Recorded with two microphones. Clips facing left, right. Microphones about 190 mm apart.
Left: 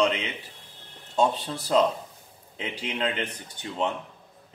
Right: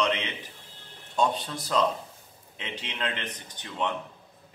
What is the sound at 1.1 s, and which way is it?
A man's voice, 25° left (ahead or behind).